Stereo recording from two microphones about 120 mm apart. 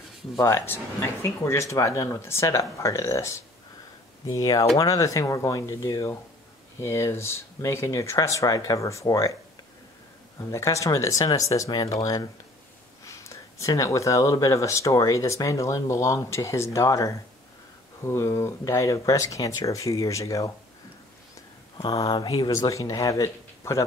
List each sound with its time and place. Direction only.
0.4 s speech: 20° left (ahead or behind)
10.5 s speech: 25° left (ahead or behind)
21.9 s speech: 35° left (ahead or behind)
22.5 s speech: 25° left (ahead or behind)